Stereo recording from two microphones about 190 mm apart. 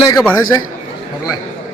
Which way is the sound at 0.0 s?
20° left (ahead or behind).